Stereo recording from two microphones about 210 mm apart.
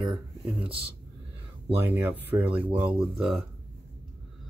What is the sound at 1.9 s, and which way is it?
Speech, 10° right (ahead or behind).